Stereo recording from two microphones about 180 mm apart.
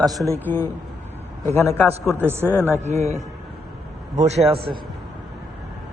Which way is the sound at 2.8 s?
35° right (ahead or behind).